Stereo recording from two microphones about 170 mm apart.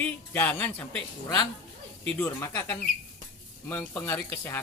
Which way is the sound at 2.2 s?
15° left (ahead or behind).